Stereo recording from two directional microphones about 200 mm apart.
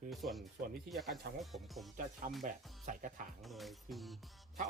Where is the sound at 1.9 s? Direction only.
40° right (ahead or behind).